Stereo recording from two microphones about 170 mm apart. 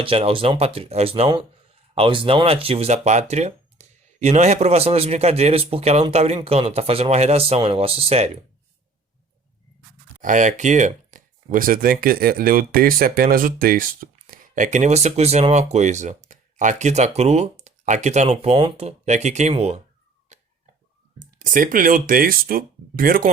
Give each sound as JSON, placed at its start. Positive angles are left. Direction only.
{"t": 0.0, "sound": "speech", "side_deg": -35}
{"t": 10.2, "sound": "speech", "side_deg": -50}
{"t": 20.3, "sound": "a sound", "side_deg": -45}
{"t": 21.3, "sound": "speech", "side_deg": -55}